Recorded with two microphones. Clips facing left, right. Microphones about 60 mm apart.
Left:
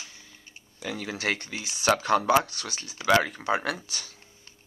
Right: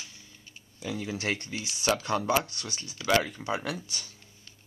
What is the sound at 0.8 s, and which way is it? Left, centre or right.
Speech, left.